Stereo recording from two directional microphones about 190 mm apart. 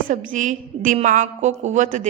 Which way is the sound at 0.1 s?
40° right (ahead or behind).